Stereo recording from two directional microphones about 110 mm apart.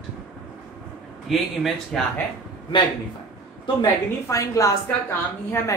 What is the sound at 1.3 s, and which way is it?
Speech, centre (ahead or behind).